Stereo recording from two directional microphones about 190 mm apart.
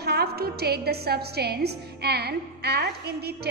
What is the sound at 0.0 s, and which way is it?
A woman's voice, 55° right (ahead or behind).